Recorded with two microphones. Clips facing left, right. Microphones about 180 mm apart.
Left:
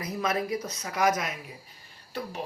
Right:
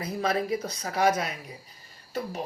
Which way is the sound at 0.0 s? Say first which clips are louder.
Right 2 dB; 30° right (ahead or behind).